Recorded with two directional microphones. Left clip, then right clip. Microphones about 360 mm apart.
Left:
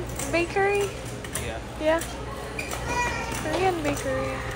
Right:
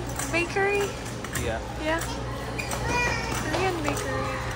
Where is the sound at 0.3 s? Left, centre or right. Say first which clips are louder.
Left 2 dB; centre.